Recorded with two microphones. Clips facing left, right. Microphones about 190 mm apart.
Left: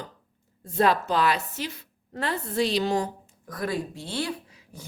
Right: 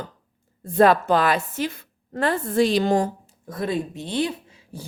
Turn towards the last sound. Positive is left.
turn(degrees=-30)  # may be behind; listen again after turning